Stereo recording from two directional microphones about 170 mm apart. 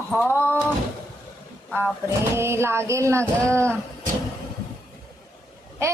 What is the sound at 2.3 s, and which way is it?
Speech, 15° right (ahead or behind).